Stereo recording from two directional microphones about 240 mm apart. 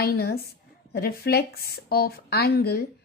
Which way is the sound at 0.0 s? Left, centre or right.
Left.